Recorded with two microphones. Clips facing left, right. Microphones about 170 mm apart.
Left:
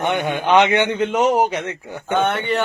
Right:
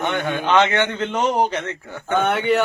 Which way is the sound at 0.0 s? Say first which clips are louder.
Left 2 dB; 15° left (ahead or behind).